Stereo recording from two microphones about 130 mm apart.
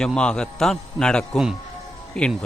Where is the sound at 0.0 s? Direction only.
5° left (ahead or behind).